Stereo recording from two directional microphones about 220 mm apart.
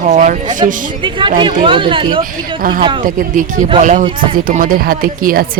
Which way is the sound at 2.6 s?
40° right (ahead or behind).